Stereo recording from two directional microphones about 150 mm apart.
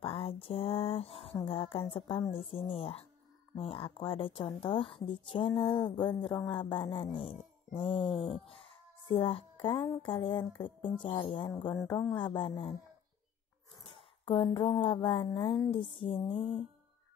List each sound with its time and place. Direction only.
0.0 s a sound: 40° left (ahead or behind)
1.5 s speech: 40° left (ahead or behind)
13.8 s speech: 35° left (ahead or behind)